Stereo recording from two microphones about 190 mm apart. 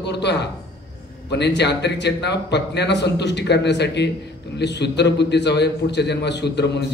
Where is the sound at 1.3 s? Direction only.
65° left (ahead or behind).